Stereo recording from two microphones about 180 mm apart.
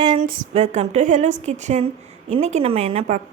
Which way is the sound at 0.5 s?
40° right (ahead or behind).